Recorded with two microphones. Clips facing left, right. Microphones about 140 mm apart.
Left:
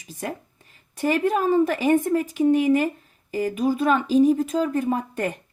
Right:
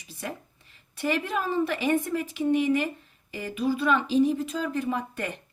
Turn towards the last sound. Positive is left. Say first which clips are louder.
# left 5 dB
turn(degrees=45)  # may be behind; listen again after turning